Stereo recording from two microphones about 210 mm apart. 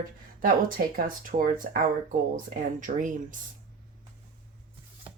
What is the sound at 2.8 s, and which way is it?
Speech, 40° right (ahead or behind).